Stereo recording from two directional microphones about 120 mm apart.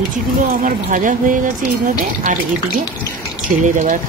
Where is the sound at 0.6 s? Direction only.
90° right.